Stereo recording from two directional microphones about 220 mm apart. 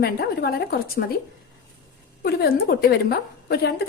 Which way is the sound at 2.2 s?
45° left (ahead or behind).